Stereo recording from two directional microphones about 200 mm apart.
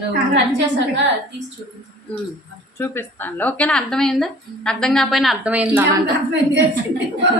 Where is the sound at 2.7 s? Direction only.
10° left (ahead or behind); by 5.8 s 5° right (ahead or behind).